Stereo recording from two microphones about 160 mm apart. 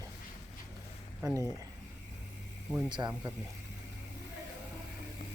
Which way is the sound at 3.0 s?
20° right (ahead or behind).